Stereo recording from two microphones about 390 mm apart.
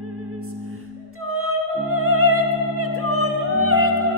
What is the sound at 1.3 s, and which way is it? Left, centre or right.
Music, right.